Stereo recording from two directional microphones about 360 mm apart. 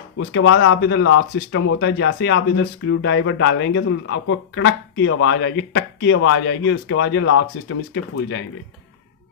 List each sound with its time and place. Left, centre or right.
0.3 s speech: left